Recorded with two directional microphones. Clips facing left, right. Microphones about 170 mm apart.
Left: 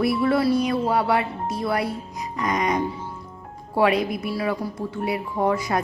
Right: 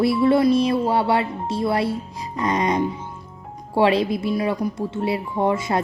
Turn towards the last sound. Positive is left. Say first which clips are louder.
# right 1 dB
turn(degrees=-25)  # may be behind; listen again after turning